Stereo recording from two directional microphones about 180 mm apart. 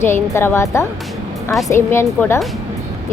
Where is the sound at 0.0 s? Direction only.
15° left (ahead or behind).